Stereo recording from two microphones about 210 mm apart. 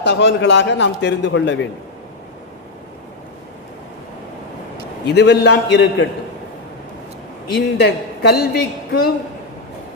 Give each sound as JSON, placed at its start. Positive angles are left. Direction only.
{"t": 0.0, "sound": "a man's voice", "side_deg": 55}
{"t": 5.0, "sound": "a woman's voice", "side_deg": 50}
{"t": 7.8, "sound": "a woman's voice", "side_deg": 50}